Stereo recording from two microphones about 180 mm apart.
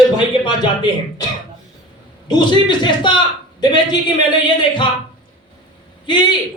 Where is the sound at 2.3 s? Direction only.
25° left (ahead or behind).